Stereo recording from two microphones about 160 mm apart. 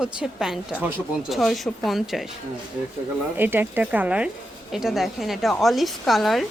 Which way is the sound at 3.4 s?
10° right (ahead or behind).